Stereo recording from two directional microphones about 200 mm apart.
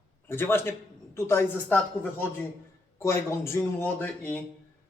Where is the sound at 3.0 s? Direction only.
15° left (ahead or behind).